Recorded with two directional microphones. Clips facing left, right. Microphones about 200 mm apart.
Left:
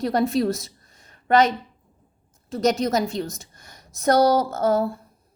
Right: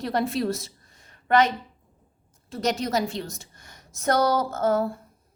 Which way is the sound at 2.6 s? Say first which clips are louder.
Left 4 dB; 45° left (ahead or behind).